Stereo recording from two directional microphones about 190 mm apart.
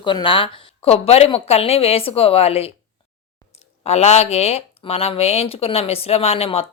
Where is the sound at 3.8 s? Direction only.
35° left (ahead or behind).